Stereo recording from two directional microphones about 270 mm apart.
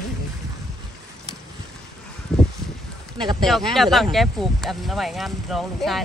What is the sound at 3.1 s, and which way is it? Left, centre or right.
Speech, centre.